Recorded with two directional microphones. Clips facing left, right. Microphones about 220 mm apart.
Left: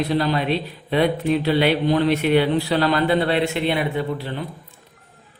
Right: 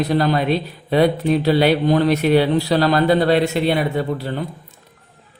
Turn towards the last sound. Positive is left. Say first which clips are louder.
# right 3 dB
turn(degrees=-40)  # may be behind; listen again after turning